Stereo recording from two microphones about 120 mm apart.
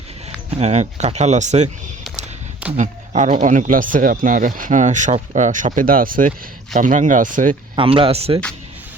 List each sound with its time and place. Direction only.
0.5 s speech: 70° right (ahead or behind)
2.7 s speech: 90° right
7.8 s speech: 50° right (ahead or behind)